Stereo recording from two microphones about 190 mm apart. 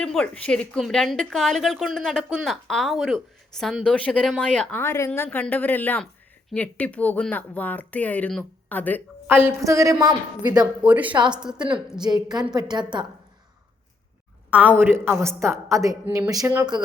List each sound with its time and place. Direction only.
0.0 s a woman's voice: 5° left (ahead or behind)
9.2 s speech: 10° right (ahead or behind)
10.8 s speech: 10° right (ahead or behind)
11.1 s a woman's voice: 25° right (ahead or behind)
11.3 s a woman's voice: 5° right (ahead or behind)
11.9 s a woman's voice: 20° right (ahead or behind)
14.8 s speech: 10° right (ahead or behind)